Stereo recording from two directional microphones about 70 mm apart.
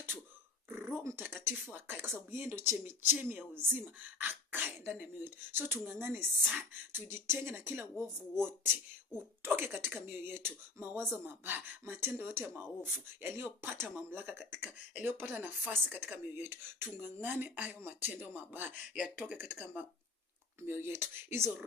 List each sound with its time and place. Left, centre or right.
0.7 s speech: right
16.5 s speech: right